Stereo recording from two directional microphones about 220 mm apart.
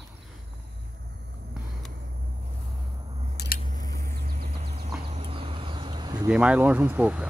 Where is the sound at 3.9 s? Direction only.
45° right (ahead or behind).